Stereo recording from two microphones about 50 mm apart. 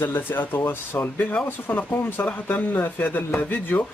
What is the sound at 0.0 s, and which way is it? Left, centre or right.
Speech, left.